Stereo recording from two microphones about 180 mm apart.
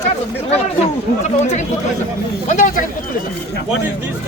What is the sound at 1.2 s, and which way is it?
Speech, 40° left (ahead or behind).